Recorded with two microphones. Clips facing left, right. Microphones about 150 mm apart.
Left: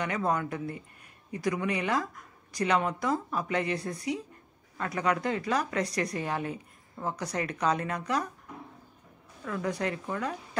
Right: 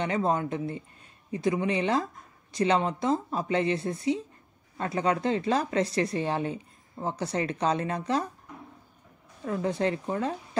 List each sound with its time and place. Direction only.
0.0 s speech: 25° right (ahead or behind)
9.4 s speech: 30° right (ahead or behind)